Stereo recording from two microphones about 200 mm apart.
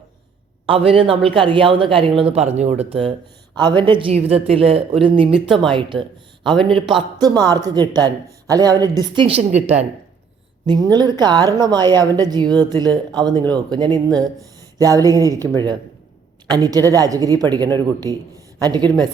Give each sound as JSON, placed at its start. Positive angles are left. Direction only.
{"t": 0.6, "sound": "speech", "side_deg": -30}
{"t": 5.3, "sound": "speech", "side_deg": 0}
{"t": 5.7, "sound": "speech", "side_deg": -25}
{"t": 10.9, "sound": "speech", "side_deg": -20}
{"t": 16.5, "sound": "speech", "side_deg": -20}
{"t": 18.0, "sound": "a man's voice", "side_deg": 15}
{"t": 18.6, "sound": "speech", "side_deg": -20}